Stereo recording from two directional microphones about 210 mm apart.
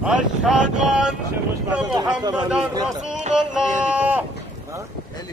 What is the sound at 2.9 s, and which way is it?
Speech, centre (ahead or behind).